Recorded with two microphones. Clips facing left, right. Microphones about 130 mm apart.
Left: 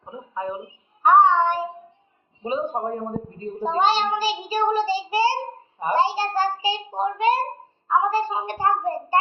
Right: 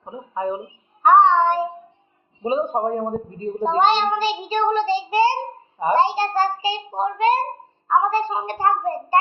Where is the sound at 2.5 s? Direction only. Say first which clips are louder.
Right 4 dB; 20° right (ahead or behind).